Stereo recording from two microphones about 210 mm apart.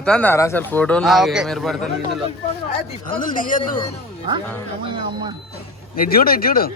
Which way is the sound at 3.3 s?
40° left (ahead or behind).